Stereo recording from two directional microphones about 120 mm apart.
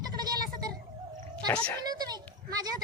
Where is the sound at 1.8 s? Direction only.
35° right (ahead or behind).